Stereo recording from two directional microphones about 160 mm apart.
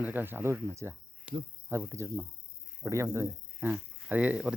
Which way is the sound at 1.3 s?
5° right (ahead or behind).